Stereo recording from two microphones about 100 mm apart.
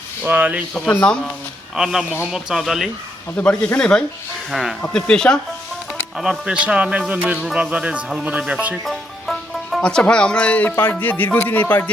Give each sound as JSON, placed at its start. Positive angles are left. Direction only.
{"t": 0.2, "sound": "speech", "side_deg": -15}
{"t": 0.7, "sound": "speech", "side_deg": 10}
{"t": 1.7, "sound": "speech", "side_deg": -5}
{"t": 3.3, "sound": "speech", "side_deg": 10}
{"t": 6.1, "sound": "speech", "side_deg": -5}
{"t": 8.8, "sound": "speech", "side_deg": 0}